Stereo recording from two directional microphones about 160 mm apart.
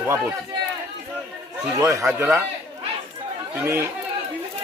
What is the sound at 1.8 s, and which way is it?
Speech, 20° right (ahead or behind).